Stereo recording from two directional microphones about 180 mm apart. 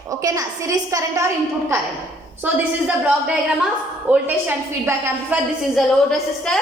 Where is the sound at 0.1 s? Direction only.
20° right (ahead or behind).